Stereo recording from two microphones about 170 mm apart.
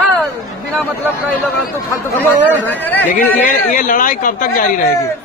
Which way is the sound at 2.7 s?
10° left (ahead or behind).